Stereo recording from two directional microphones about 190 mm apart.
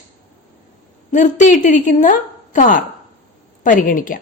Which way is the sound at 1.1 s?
40° left (ahead or behind).